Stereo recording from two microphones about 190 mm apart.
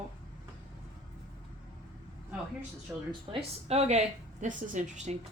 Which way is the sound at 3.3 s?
30° right (ahead or behind).